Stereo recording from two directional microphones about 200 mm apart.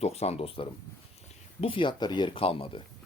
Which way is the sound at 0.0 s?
30° left (ahead or behind).